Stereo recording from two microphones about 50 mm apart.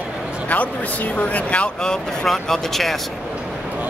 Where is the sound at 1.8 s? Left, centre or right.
Centre.